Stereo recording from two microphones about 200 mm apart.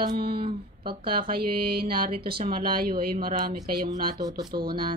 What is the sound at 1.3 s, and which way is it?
Speech, 50° right (ahead or behind).